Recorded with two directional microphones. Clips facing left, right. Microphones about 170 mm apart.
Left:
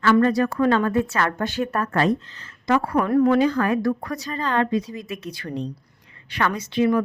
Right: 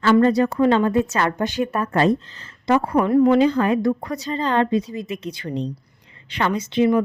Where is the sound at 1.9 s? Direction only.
30° right (ahead or behind).